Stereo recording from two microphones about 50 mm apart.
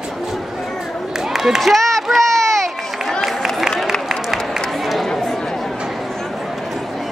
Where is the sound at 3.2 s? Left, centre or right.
Centre.